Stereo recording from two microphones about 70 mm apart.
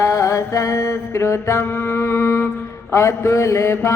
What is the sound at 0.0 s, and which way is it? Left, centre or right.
Mantra, left.